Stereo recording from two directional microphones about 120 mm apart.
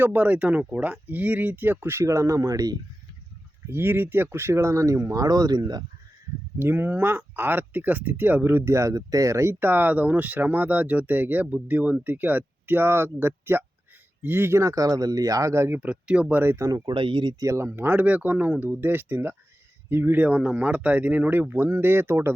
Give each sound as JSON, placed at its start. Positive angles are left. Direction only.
{"t": 0.0, "sound": "speech", "side_deg": -10}
{"t": 3.7, "sound": "speech", "side_deg": -20}
{"t": 6.6, "sound": "speech", "side_deg": -20}
{"t": 16.9, "sound": "speech", "side_deg": -45}
{"t": 17.4, "sound": "speech", "side_deg": -25}